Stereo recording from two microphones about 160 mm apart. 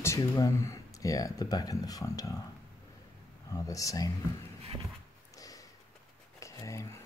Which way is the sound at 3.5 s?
20° left (ahead or behind).